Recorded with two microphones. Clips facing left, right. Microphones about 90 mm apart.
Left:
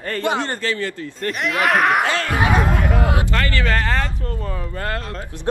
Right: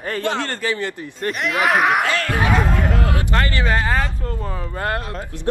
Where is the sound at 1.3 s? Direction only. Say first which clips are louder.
Even; centre (ahead or behind).